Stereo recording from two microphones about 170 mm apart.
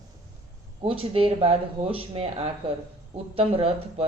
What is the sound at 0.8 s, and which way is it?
Speech, 35° right (ahead or behind).